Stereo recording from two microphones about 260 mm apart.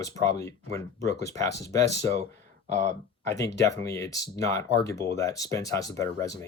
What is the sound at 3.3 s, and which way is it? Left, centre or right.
Speech, left.